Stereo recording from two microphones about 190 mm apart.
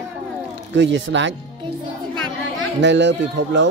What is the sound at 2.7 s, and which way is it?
Speech, 65° right (ahead or behind).